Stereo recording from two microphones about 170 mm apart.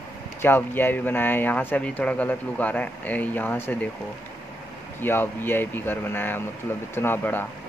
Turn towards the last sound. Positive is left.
turn(degrees=10)  # may be behind; listen again after turning